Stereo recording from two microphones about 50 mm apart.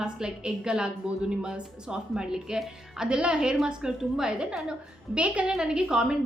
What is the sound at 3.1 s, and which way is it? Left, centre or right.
A woman's voice, centre.